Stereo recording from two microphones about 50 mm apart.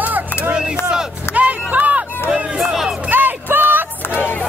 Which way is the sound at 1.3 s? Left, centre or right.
Right.